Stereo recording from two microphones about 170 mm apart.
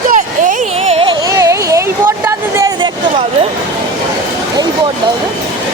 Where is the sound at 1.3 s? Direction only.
20° right (ahead or behind).